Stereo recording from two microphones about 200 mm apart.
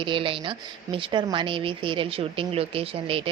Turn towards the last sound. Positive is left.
turn(degrees=-25)  # may be behind; listen again after turning